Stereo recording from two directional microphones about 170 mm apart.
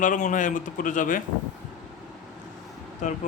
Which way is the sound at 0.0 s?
50° left (ahead or behind).